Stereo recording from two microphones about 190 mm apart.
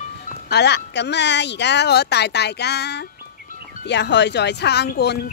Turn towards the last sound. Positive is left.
turn(degrees=60)  # may be behind; listen again after turning